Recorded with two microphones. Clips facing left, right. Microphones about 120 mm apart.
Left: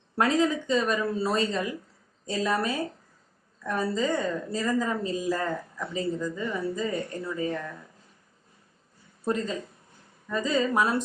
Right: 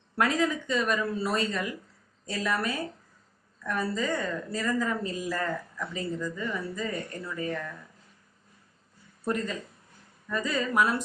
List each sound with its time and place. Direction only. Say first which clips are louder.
0.2 s a woman's voice: left 3 dB; 25° left (ahead or behind)
9.2 s a woman's voice: left 2 dB; 25° left (ahead or behind)